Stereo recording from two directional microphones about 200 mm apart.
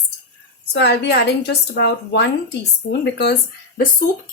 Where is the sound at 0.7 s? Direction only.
55° left (ahead or behind).